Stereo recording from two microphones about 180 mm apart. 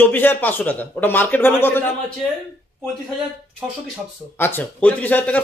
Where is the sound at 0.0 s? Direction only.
10° left (ahead or behind).